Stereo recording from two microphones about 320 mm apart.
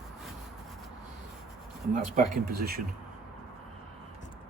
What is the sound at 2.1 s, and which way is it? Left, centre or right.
Speech, right.